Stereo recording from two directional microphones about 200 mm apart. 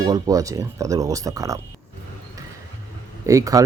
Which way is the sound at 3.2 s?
15° right (ahead or behind).